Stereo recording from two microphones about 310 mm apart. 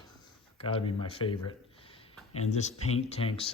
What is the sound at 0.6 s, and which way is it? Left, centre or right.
Speech, centre.